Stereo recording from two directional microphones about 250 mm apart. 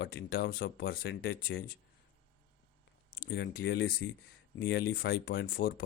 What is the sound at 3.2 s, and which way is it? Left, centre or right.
Speech, left.